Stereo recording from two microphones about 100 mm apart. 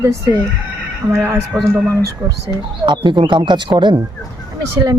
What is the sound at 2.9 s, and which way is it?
Speech, 55° right (ahead or behind).